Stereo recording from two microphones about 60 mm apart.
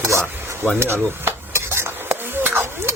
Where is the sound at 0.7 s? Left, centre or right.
Right.